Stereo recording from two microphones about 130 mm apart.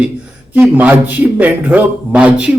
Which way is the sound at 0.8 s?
15° right (ahead or behind).